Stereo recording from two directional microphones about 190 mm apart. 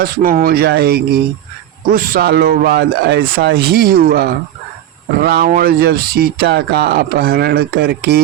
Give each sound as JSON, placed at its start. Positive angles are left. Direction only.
{"t": 0.0, "sound": "speech", "side_deg": -50}